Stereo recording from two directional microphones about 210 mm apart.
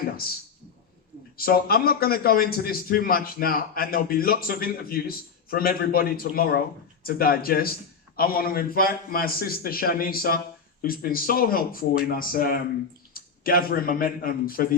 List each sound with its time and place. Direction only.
1.4 s a man's voice: 45° left (ahead or behind)